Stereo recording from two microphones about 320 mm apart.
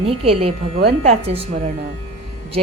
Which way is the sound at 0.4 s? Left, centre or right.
Centre.